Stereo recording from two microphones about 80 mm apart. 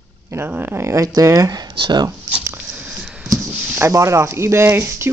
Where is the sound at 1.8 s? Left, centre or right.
Right.